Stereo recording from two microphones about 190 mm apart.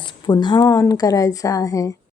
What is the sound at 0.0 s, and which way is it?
A woman's voice, 25° left (ahead or behind).